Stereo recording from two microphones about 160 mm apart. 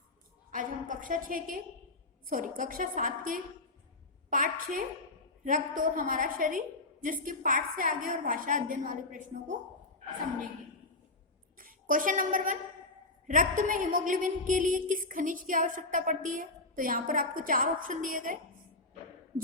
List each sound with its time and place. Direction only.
0.5 s a woman's voice: 55° right (ahead or behind)
11.5 s a woman's voice: 60° right (ahead or behind)